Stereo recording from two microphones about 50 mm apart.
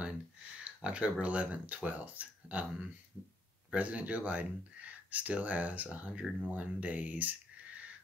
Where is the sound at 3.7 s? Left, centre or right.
Right.